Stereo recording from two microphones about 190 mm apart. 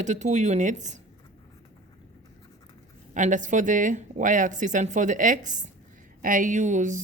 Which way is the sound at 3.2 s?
40° right (ahead or behind).